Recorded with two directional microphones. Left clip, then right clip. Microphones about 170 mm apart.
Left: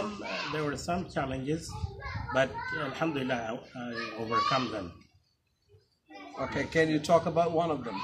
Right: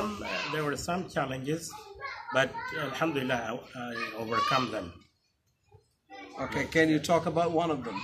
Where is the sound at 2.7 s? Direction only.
10° right (ahead or behind).